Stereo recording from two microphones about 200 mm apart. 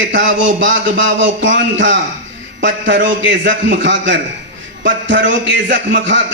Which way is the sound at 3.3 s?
65° right (ahead or behind).